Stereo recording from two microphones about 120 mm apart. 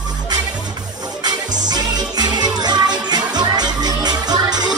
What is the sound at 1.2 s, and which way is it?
Music, 35° right (ahead or behind).